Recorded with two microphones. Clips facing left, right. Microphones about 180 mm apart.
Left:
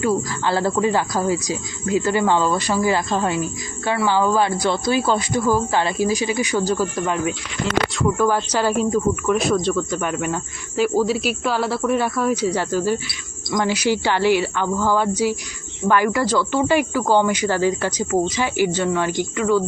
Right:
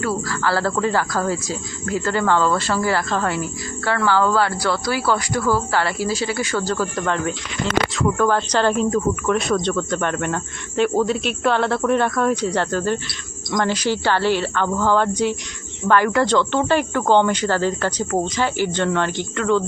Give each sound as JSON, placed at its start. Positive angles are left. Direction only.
{"t": 0.0, "sound": "speech", "side_deg": 15}